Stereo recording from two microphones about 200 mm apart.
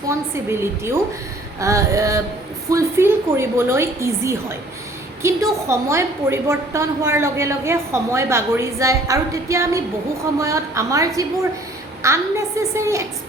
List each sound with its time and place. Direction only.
0.3 s a woman's voice: 10° right (ahead or behind)